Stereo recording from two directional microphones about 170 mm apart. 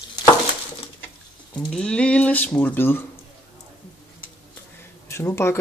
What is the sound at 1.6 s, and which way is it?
Speech, 5° left (ahead or behind).